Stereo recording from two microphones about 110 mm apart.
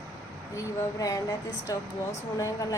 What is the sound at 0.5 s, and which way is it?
A woman's voice, 30° left (ahead or behind).